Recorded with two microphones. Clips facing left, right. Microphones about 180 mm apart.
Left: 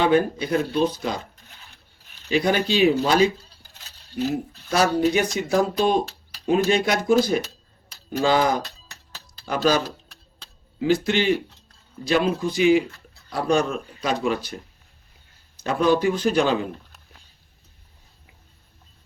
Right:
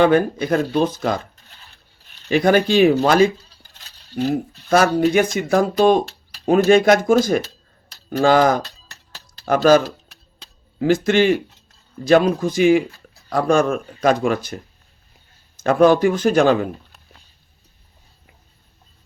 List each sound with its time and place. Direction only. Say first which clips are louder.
0.0 s speech: right 4 dB; 50° right (ahead or behind)
2.3 s speech: right 6 dB; 55° right (ahead or behind)
15.5 s speech: right 6 dB; 50° right (ahead or behind)